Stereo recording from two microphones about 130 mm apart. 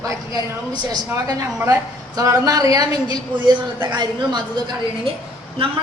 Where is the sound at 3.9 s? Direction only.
35° right (ahead or behind).